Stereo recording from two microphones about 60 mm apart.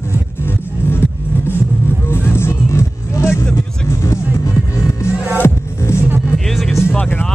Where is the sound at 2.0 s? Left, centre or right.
Left.